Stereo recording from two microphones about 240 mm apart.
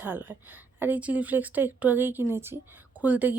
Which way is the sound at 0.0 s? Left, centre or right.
Centre.